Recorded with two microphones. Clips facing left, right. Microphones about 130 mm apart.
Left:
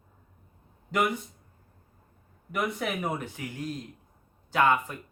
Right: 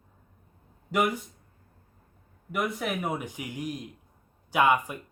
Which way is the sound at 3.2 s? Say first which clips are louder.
Right 1 dB; 15° right (ahead or behind).